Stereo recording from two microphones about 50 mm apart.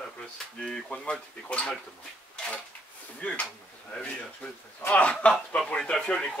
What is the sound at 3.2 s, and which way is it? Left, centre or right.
Speech, left.